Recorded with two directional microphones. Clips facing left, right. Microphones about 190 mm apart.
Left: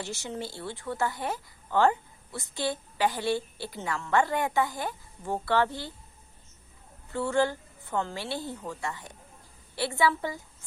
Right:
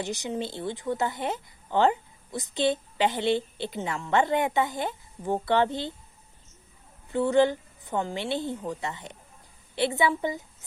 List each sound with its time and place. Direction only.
0.0 s speech: 15° right (ahead or behind)
7.1 s speech: 20° right (ahead or behind)